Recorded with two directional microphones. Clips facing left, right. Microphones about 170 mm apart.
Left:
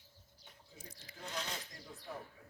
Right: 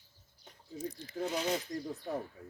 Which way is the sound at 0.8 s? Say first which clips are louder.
Right 17 dB; 10° left (ahead or behind).